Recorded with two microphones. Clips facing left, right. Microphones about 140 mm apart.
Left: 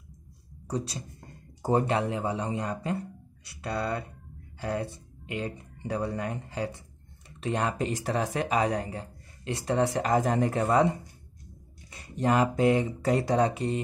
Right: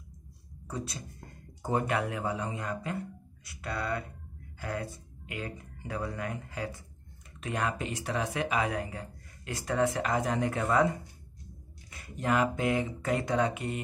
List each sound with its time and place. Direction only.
0.7 s speech: 35° left (ahead or behind)